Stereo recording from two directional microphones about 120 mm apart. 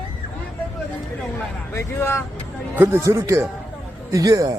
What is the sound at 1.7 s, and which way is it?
Speech, 20° left (ahead or behind).